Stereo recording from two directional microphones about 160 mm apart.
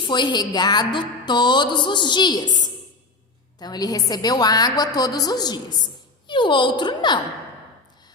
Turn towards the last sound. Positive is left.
turn(degrees=30)  # may be behind; listen again after turning